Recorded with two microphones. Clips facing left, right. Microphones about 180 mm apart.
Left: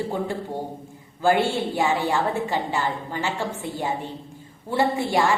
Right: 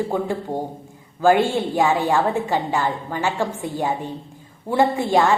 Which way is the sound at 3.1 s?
15° right (ahead or behind).